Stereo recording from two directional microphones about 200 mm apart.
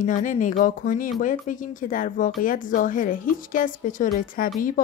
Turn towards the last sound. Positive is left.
turn(degrees=45)  # may be behind; listen again after turning